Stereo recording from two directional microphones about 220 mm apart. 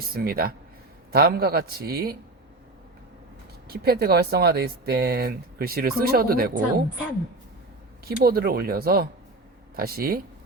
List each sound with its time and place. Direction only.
0.1 s speech: 45° right (ahead or behind)
3.7 s speech: 45° right (ahead or behind)
8.0 s speech: 45° right (ahead or behind)